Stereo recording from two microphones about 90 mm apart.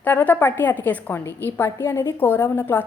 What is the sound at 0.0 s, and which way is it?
A woman's voice, 20° left (ahead or behind).